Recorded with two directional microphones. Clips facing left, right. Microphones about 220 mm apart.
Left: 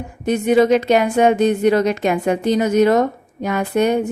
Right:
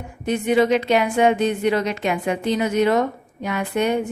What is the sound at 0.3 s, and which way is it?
A woman's voice, 45° left (ahead or behind).